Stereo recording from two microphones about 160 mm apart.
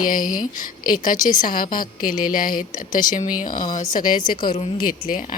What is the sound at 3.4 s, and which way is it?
Speech, 60° left (ahead or behind).